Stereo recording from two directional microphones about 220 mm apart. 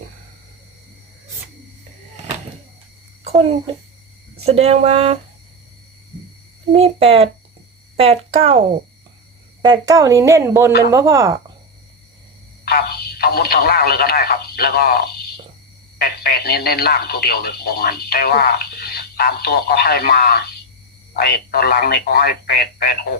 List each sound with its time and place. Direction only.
4.4 s speech: 30° right (ahead or behind)
6.7 s speech: 25° right (ahead or behind)
12.6 s speech: 45° left (ahead or behind)